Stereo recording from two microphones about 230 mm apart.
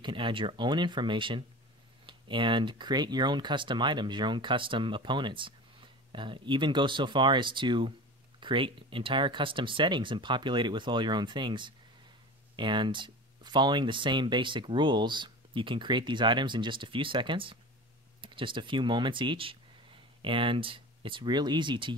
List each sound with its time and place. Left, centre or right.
0.0 s speech: right